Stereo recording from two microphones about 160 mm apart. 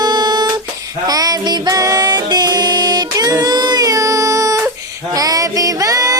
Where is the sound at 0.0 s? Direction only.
25° right (ahead or behind).